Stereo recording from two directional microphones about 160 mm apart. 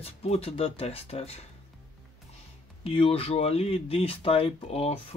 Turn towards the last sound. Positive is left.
turn(degrees=40)  # may be behind; listen again after turning